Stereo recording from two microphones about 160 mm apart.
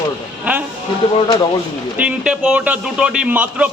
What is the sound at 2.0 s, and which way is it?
A man's voice, 5° right (ahead or behind).